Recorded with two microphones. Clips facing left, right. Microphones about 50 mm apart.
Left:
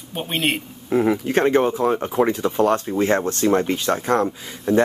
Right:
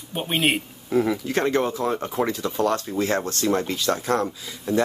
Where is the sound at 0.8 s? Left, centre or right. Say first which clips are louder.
Left 4 dB; left.